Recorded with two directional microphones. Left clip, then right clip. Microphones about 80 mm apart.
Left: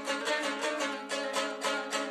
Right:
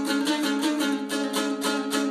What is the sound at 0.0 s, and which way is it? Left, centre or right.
Music, left.